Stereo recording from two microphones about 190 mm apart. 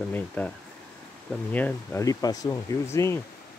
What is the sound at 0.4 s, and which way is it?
Speech, 10° left (ahead or behind).